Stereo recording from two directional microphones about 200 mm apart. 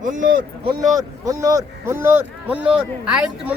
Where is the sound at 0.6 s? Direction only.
15° right (ahead or behind).